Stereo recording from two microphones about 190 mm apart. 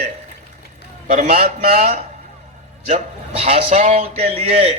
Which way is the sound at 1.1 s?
35° right (ahead or behind).